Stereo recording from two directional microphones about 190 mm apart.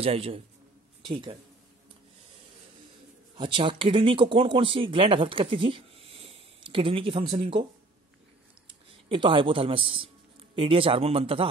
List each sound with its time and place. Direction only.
0.0 s a man's voice: 30° right (ahead or behind)
3.3 s speech: 25° right (ahead or behind)
9.1 s a man's voice: 25° right (ahead or behind)